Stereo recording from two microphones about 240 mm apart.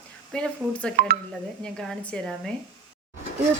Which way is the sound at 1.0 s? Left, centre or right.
Right.